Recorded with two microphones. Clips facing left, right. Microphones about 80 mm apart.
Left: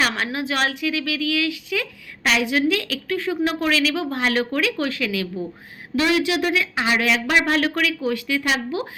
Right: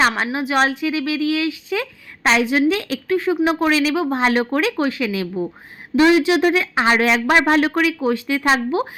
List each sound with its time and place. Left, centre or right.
0.3 s speech: right